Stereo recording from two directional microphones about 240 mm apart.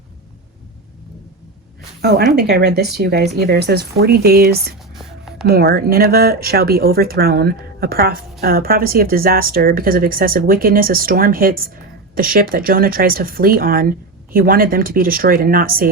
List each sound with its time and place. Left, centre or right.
2.0 s speech: right
4.9 s music: centre
5.5 s speech: right